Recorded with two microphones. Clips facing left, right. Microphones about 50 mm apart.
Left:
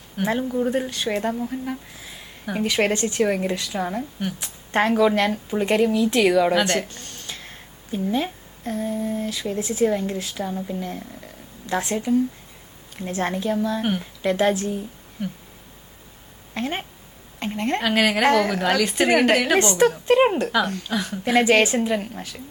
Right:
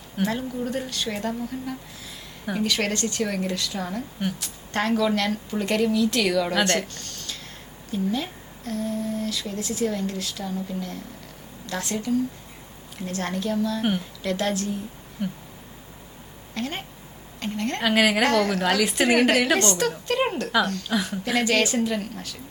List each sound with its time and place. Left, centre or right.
0.2 s speech: centre
2.6 s speech: left
6.6 s a woman's voice: centre
6.8 s a woman's voice: centre
16.6 s a woman's voice: left
17.8 s a woman's voice: centre
18.3 s a woman's voice: centre
18.6 s a woman's voice: centre
19.5 s speech: left
20.8 s a woman's voice: centre
21.3 s speech: left